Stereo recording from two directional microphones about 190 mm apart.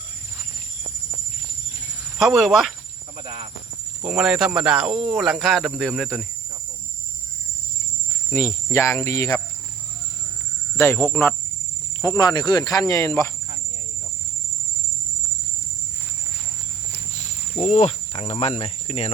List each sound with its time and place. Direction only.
2.1 s speech: centre (ahead or behind)
3.2 s speech: 30° right (ahead or behind)
4.0 s speech: 5° right (ahead or behind)
8.3 s insect: 15° left (ahead or behind)
10.8 s insect: 15° left (ahead or behind)
12.0 s cricket: 20° left (ahead or behind)
17.6 s cricket: 35° left (ahead or behind)